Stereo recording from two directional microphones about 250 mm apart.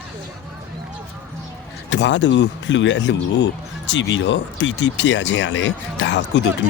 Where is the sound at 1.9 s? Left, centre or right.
Left.